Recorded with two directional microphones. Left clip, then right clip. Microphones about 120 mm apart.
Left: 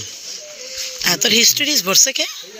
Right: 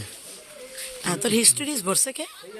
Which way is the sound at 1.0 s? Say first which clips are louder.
Left 9 dB; 5° right (ahead or behind).